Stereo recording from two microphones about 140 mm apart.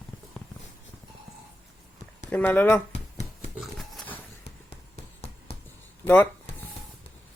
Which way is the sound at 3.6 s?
Centre (ahead or behind).